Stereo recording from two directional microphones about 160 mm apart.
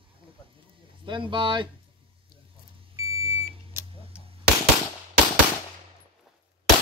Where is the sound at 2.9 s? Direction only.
20° right (ahead or behind).